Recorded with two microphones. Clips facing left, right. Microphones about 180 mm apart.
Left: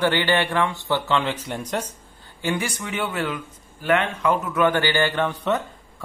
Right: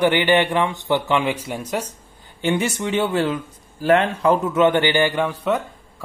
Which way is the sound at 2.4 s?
25° right (ahead or behind).